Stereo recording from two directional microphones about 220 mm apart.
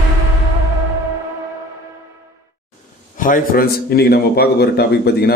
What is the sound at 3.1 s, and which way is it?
Speech, 40° left (ahead or behind).